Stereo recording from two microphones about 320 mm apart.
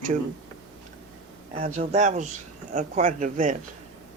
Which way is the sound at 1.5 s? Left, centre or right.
Centre.